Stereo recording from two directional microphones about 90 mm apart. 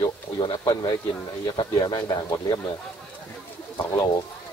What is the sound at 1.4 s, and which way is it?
Speech, 50° left (ahead or behind).